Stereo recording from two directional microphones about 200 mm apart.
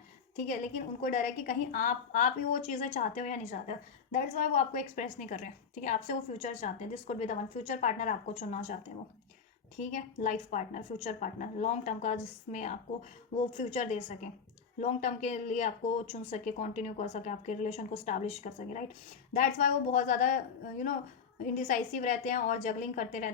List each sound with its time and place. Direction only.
0.3 s speech: 40° left (ahead or behind)